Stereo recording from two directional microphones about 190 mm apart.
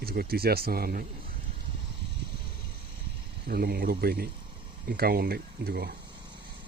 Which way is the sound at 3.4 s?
55° right (ahead or behind).